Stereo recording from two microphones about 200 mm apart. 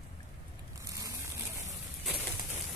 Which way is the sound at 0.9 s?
15° right (ahead or behind).